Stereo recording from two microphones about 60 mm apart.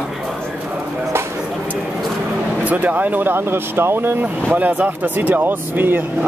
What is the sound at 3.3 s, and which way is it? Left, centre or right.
Speech, right.